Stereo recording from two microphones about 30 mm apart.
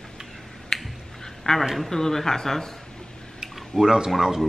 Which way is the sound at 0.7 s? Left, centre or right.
Centre.